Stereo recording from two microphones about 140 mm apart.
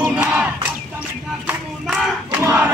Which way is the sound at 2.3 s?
10° right (ahead or behind).